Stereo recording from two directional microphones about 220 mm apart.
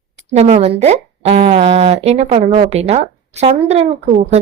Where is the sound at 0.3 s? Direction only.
30° right (ahead or behind).